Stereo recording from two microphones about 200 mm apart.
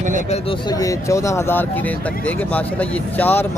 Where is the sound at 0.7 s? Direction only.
15° left (ahead or behind).